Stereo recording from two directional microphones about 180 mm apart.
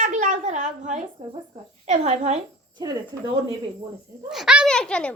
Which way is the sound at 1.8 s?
40° right (ahead or behind).